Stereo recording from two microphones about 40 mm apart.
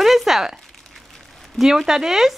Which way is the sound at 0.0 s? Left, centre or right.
Centre.